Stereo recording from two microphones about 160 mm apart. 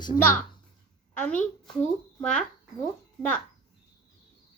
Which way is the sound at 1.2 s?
10° left (ahead or behind).